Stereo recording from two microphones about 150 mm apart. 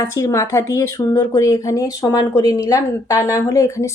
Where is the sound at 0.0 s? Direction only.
20° left (ahead or behind).